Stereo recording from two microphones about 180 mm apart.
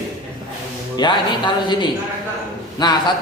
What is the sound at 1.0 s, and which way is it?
A man's voice, 25° left (ahead or behind).